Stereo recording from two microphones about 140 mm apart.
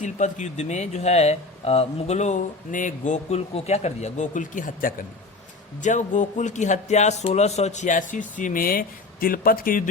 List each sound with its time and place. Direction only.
0.0 s speech: 60° left (ahead or behind); by 4.9 s 80° left
5.8 s speech: 60° left (ahead or behind); by 9.8 s 90° left